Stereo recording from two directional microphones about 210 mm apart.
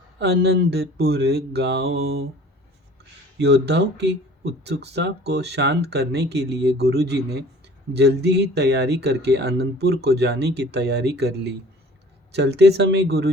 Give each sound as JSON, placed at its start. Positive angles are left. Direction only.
{"t": 0.2, "sound": "speech", "side_deg": -50}
{"t": 3.3, "sound": "speech", "side_deg": -55}